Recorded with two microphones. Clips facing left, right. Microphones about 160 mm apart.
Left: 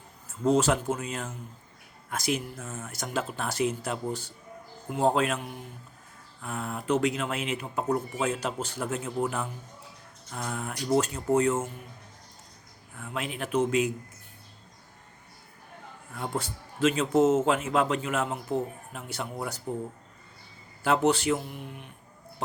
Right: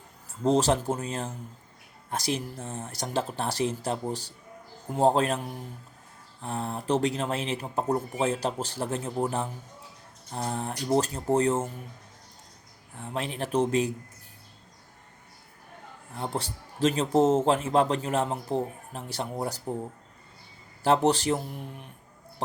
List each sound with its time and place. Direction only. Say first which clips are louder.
0.4 s speech: even; 35° right (ahead or behind)
13.0 s speech: right 2 dB; 35° right (ahead or behind)
16.1 s speech: even; 30° right (ahead or behind)
20.8 s speech: right 1 dB; 35° right (ahead or behind)